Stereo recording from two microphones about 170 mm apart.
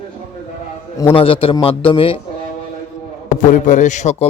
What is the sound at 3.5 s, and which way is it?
Speech, 50° left (ahead or behind).